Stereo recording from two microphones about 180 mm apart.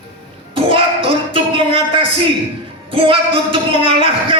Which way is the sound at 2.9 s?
30° right (ahead or behind).